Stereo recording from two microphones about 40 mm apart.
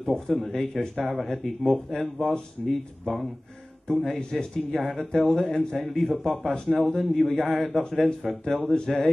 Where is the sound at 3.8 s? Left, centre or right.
Centre.